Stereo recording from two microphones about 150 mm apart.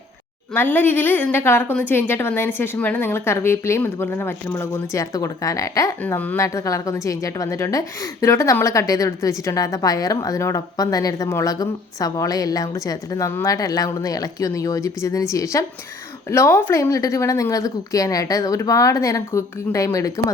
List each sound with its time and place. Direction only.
0.5 s a woman's voice: 10° left (ahead or behind)
6.0 s a woman's voice: 10° left (ahead or behind)